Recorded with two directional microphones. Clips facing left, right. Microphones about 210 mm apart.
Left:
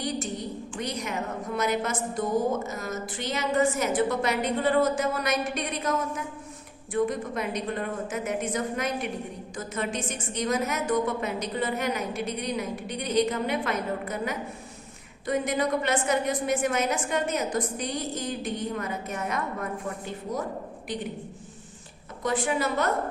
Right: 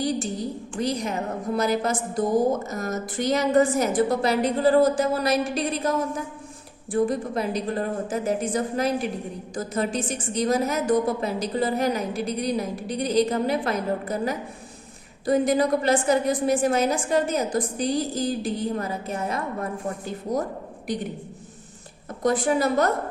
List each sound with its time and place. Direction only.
0.0 s a woman's voice: 35° right (ahead or behind)
22.2 s a woman's voice: 40° right (ahead or behind)